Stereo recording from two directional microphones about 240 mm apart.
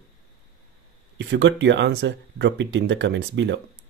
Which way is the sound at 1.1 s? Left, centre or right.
Right.